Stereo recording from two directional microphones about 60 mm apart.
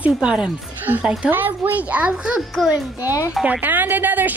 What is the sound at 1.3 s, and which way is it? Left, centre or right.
A woman's voice, right.